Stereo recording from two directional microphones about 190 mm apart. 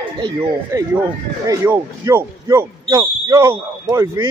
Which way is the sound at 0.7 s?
15° right (ahead or behind).